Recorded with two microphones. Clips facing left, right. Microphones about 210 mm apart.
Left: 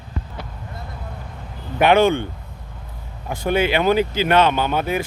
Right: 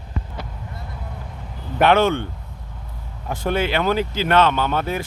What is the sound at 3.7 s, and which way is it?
Speech, 15° left (ahead or behind).